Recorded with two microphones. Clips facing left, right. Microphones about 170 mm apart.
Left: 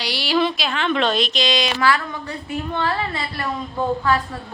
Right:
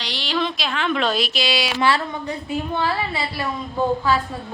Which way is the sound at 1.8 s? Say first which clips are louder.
Even; 20° right (ahead or behind).